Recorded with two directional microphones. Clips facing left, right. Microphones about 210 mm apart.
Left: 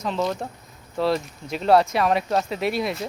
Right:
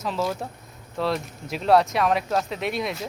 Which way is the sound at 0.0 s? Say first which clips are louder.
Left 2 dB; 5° right (ahead or behind).